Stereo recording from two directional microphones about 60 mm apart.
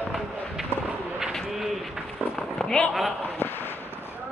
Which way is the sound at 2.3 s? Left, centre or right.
Centre.